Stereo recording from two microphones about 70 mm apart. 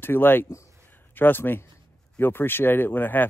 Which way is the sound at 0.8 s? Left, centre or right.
Left.